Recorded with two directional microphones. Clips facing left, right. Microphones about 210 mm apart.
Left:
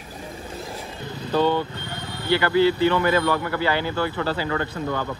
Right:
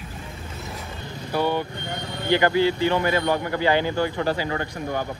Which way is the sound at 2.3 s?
15° right (ahead or behind).